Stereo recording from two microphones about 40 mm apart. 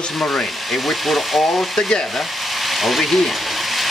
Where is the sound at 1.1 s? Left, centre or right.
Centre.